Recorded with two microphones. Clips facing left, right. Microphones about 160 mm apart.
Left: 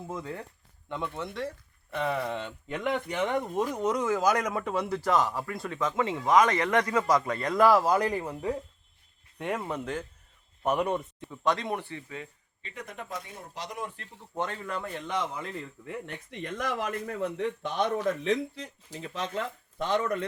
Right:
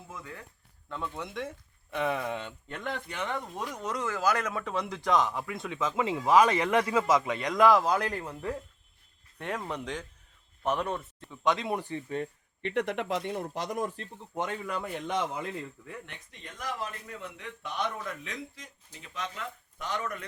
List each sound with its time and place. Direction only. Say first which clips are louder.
0.1 s speech: left 7 dB; 35° left (ahead or behind)
2.0 s speech: left 1 dB; 5° right (ahead or behind)
2.7 s a man's voice: left 7 dB; 20° left (ahead or behind)
11.4 s speech: even; centre (ahead or behind)
11.7 s speech: right 1 dB; 15° right (ahead or behind)
12.0 s speech: right 7 dB; 45° right (ahead or behind)
12.6 s speech: right 11 dB; 75° right (ahead or behind); by 14.1 s 35° right (ahead or behind)
14.3 s speech: even; 15° right (ahead or behind)
16.4 s speech: left 5 dB; 70° left (ahead or behind)
17.2 s speech: left 12 dB; 40° left (ahead or behind)